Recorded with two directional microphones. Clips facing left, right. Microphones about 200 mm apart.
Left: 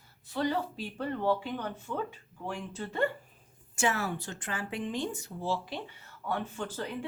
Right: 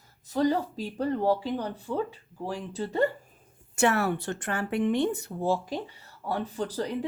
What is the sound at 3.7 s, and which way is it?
Speech, 60° right (ahead or behind).